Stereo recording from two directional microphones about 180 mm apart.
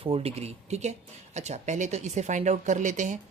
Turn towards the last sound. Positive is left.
turn(degrees=-45)  # may be behind; listen again after turning